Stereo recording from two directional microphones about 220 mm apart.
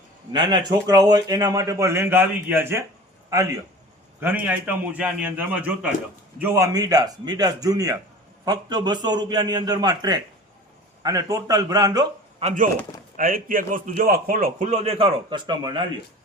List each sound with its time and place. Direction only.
0.3 s a man's voice: 20° right (ahead or behind)
4.2 s a man's voice: 10° right (ahead or behind)